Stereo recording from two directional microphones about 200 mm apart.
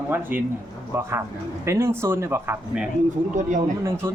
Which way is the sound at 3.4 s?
40° right (ahead or behind).